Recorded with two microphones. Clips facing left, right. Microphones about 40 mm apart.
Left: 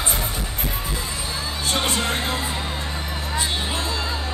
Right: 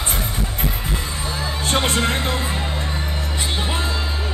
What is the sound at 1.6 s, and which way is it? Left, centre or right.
Music, right.